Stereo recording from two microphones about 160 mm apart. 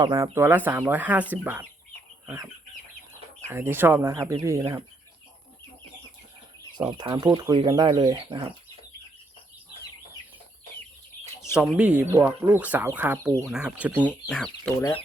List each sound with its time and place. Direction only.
0.0 s speech: 20° right (ahead or behind)
2.2 s chicken: 20° right (ahead or behind)
3.4 s speech: 15° right (ahead or behind)
6.7 s speech: 25° right (ahead or behind)
11.5 s speech: 5° right (ahead or behind)
13.9 s speech: 10° left (ahead or behind)